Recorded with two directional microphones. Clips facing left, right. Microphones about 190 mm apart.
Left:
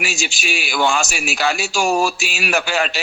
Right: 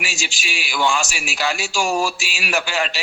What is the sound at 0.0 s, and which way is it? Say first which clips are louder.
A man's voice: left 5 dB; 55° left (ahead or behind).